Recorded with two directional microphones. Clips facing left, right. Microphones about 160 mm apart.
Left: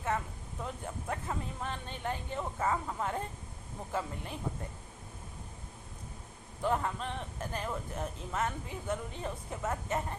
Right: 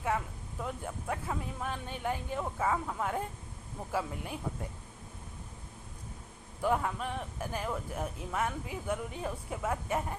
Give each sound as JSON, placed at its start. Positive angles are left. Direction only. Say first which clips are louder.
{"t": 0.6, "sound": "speech", "louder": "right 2 dB", "side_deg": -5}
{"t": 6.6, "sound": "speech", "louder": "right 1 dB", "side_deg": -5}